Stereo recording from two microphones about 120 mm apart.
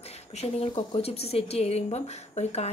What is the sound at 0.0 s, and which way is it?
A woman's voice, 60° left (ahead or behind).